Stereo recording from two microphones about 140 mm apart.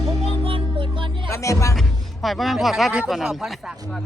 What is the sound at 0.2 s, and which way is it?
Music, 45° right (ahead or behind).